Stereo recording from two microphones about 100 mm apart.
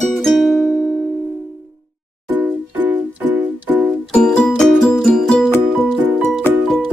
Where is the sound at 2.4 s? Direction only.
15° right (ahead or behind).